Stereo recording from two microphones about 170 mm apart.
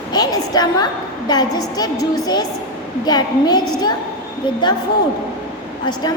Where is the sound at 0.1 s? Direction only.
25° left (ahead or behind).